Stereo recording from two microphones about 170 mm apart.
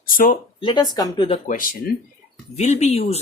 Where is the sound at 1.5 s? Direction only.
55° left (ahead or behind).